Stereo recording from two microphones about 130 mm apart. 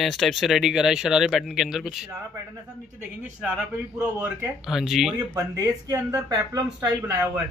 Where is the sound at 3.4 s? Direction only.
5° right (ahead or behind).